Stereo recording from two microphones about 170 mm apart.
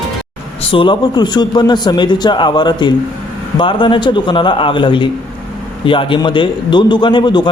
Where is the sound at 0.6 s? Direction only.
30° left (ahead or behind).